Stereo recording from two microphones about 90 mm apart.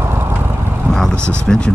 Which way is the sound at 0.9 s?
5° left (ahead or behind).